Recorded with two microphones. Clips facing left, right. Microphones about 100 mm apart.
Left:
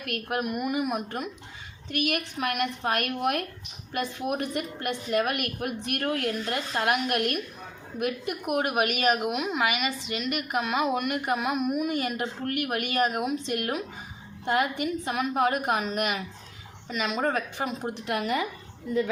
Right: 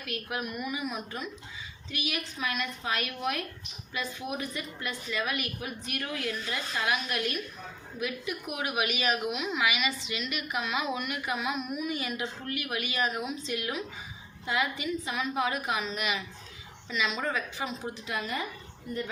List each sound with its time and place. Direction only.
0.0 s a woman's voice: 55° left (ahead or behind); by 18.4 s 75° left (ahead or behind)